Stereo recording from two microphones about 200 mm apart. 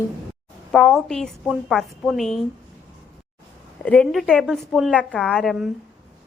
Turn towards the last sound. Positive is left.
turn(degrees=0)  # may be behind; listen again after turning